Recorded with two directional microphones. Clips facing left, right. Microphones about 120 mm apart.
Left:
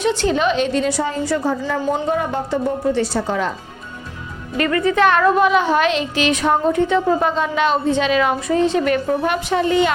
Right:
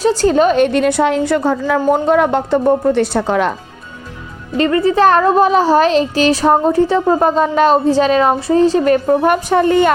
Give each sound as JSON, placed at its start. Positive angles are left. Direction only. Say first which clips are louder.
{"t": 0.0, "sound": "a woman's voice", "louder": "right 6 dB", "side_deg": -40}
{"t": 4.5, "sound": "speech", "louder": "right 4 dB", "side_deg": -30}